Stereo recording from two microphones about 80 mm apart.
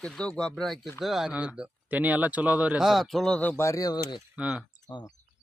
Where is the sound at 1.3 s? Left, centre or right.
Centre.